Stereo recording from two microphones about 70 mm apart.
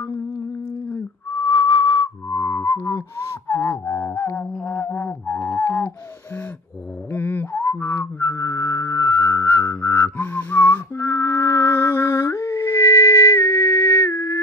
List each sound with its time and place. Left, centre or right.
1.3 s whistling: left
2.2 s music: left
3.2 s a sound: left
3.8 s music: left
5.6 s a sound: left
7.1 s whistling: left
11.1 s music: left